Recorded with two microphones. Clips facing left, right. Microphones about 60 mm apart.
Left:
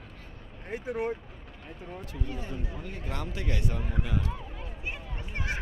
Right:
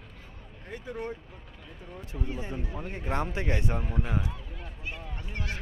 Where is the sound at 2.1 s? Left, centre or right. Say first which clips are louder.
Right 3 dB; right.